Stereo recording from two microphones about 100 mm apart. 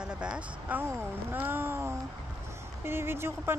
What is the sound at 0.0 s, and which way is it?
Speech, 10° right (ahead or behind).